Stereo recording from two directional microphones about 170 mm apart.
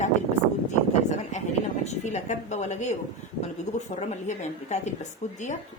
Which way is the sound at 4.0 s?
40° left (ahead or behind).